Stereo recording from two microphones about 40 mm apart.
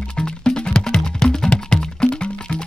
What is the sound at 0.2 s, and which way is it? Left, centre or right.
Music, left.